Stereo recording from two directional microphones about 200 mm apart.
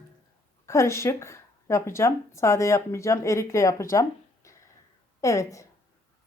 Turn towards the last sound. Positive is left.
turn(degrees=15)  # may be behind; listen again after turning